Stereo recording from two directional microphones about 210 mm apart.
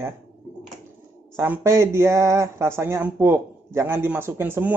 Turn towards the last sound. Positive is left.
turn(degrees=-10)  # may be behind; listen again after turning